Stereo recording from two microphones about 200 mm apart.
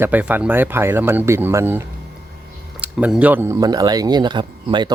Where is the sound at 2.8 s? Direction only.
5° right (ahead or behind); by 4.9 s 20° right (ahead or behind).